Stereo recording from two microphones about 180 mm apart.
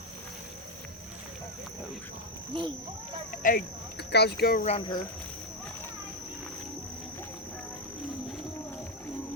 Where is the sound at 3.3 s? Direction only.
50° left (ahead or behind).